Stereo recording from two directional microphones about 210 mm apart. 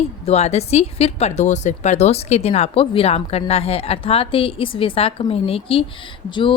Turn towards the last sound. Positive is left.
turn(degrees=25)  # may be behind; listen again after turning